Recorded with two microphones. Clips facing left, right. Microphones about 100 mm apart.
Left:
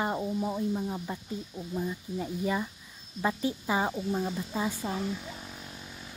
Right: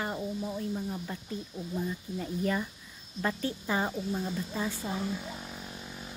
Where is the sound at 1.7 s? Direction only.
10° left (ahead or behind).